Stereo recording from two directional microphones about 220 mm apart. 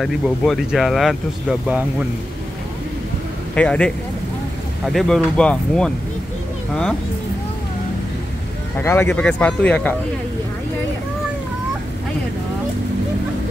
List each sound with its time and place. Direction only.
0.0 s speech: centre (ahead or behind)
3.5 s speech: 5° left (ahead or behind)
8.7 s speech: 10° left (ahead or behind)